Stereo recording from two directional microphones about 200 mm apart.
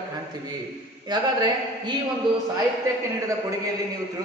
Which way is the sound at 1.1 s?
20° right (ahead or behind).